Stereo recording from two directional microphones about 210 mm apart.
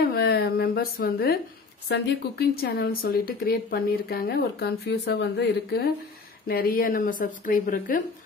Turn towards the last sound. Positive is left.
turn(degrees=40)  # may be behind; listen again after turning